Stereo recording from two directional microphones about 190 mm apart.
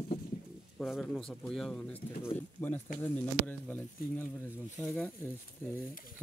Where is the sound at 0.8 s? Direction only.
Centre (ahead or behind).